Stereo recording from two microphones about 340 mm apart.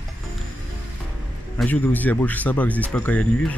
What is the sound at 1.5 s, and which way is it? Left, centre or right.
Speech, centre.